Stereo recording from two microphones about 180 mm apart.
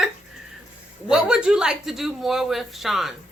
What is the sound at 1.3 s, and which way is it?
Speech, 5° right (ahead or behind).